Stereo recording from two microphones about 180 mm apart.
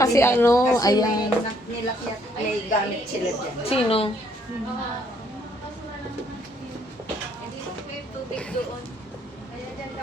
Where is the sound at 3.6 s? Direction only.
30° left (ahead or behind).